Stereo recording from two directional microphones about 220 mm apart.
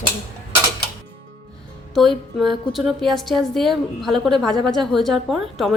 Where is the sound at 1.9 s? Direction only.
Centre (ahead or behind).